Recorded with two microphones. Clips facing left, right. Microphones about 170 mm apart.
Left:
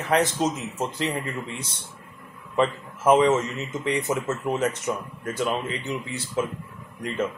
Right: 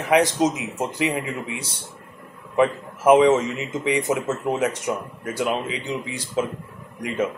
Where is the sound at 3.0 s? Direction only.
15° right (ahead or behind).